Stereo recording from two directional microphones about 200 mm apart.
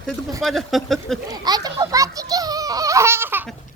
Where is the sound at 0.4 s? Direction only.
Centre (ahead or behind).